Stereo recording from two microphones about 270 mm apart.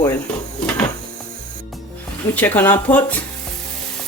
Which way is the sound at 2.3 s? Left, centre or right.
Centre.